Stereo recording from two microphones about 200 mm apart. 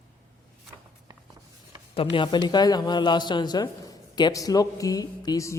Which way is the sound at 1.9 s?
25° left (ahead or behind).